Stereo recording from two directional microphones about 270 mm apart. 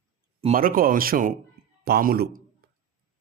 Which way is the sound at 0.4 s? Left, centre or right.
Right.